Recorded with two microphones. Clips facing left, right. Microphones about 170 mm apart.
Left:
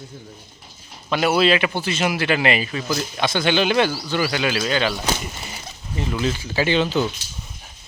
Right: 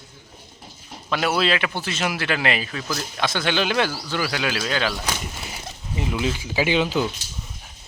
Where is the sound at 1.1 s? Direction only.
Centre (ahead or behind).